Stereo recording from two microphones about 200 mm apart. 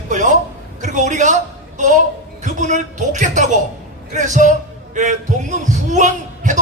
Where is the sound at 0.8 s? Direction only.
40° right (ahead or behind).